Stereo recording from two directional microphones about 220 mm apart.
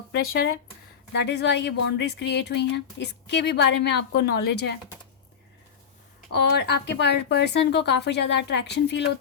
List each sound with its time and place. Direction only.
1.1 s speech: 50° left (ahead or behind)
6.3 s speech: 50° left (ahead or behind)